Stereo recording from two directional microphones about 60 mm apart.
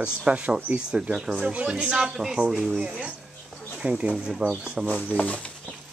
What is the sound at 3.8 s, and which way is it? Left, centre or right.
Speech, centre.